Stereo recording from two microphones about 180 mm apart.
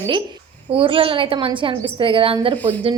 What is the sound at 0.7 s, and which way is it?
A woman's voice, 30° right (ahead or behind).